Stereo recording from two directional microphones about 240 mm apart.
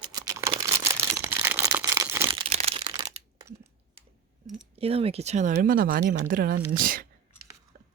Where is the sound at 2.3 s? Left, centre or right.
Right.